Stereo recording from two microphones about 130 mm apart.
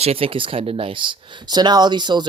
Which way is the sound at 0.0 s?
50° right (ahead or behind).